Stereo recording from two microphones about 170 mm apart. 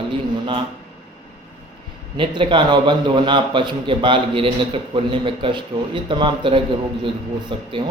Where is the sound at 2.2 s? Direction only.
30° right (ahead or behind).